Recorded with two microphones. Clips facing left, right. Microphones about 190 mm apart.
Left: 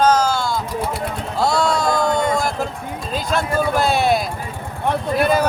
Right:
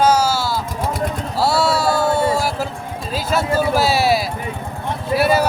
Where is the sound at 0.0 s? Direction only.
10° right (ahead or behind).